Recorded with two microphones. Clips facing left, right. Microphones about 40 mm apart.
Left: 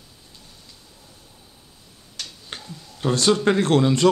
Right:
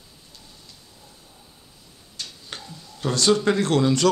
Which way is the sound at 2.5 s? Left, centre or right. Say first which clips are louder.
Left 1 dB; left.